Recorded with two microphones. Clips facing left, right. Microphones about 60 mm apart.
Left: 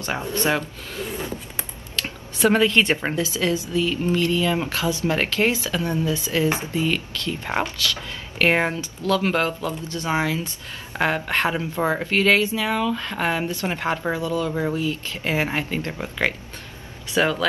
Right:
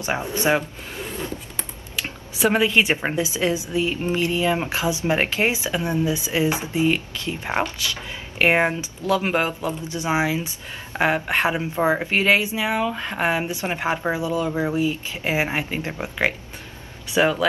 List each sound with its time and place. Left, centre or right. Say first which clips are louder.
0.0 s speech: right 1 dB; centre
2.3 s a woman's voice: left 1 dB; centre